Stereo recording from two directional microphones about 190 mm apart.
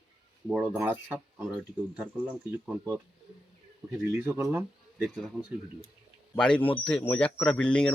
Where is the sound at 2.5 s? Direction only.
10° right (ahead or behind).